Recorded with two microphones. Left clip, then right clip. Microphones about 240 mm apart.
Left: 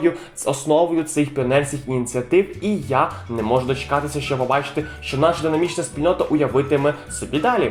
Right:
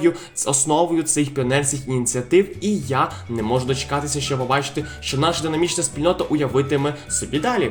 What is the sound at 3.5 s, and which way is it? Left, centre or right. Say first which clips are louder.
Speech: left 3 dB; right.